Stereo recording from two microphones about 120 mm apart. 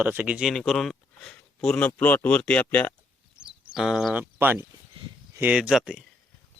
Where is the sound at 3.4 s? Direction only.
5° right (ahead or behind).